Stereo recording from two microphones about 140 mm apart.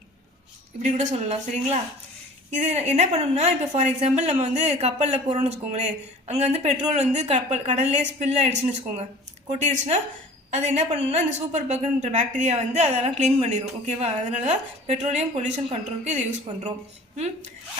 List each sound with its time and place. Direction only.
0.8 s a woman's voice: 50° right (ahead or behind)